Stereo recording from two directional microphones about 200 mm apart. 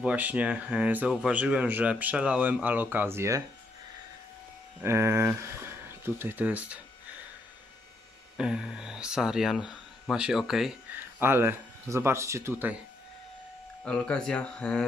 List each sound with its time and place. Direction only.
0.0 s speech: 5° right (ahead or behind)
4.8 s speech: 15° right (ahead or behind)
8.4 s speech: 5° right (ahead or behind)
13.8 s speech: 5° left (ahead or behind)